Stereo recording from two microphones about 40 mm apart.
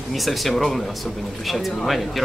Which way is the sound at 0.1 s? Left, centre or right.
Centre.